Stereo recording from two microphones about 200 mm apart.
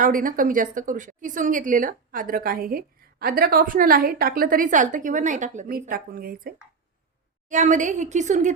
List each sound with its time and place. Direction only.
0.0 s a woman's voice: 45° right (ahead or behind)
7.5 s a woman's voice: 40° right (ahead or behind)